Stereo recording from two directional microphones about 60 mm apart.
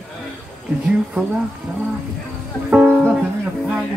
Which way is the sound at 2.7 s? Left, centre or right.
Right.